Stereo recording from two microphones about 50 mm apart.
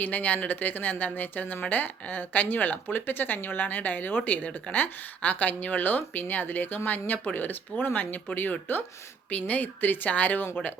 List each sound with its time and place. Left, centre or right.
0.0 s speech: left